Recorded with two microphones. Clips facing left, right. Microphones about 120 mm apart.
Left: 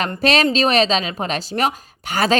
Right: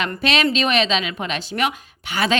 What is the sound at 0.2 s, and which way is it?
A woman's voice, 40° left (ahead or behind).